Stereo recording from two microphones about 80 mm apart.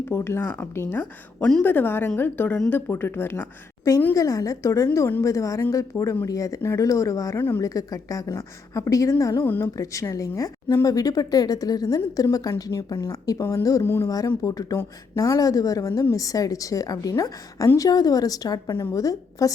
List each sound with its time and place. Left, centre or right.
0.1 s speech: left
4.1 s a woman's voice: left
7.3 s speech: left
7.6 s a woman's voice: left
9.4 s speech: left
9.7 s a woman's voice: left
13.8 s speech: left
14.4 s a woman's voice: left
18.7 s a woman's voice: left